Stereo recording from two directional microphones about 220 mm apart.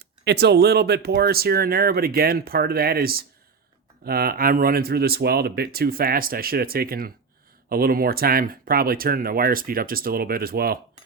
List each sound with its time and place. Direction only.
0.3 s speech: 50° right (ahead or behind)